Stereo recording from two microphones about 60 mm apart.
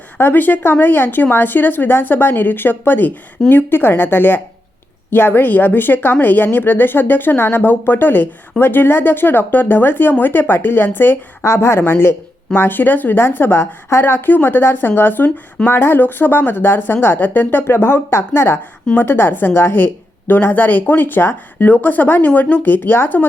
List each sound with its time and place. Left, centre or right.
0.2 s speech: left
11.4 s speech: left
11.8 s speech: left
17.7 s speech: left